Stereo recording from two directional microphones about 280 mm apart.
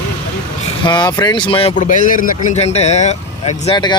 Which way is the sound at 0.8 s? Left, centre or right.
Centre.